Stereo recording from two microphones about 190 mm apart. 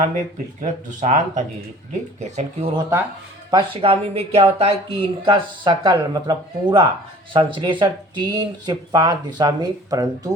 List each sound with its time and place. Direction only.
0.6 s speech: 40° right (ahead or behind); by 10.3 s 20° right (ahead or behind)